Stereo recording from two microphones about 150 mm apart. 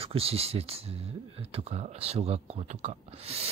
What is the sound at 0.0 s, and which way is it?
Speech, 40° right (ahead or behind).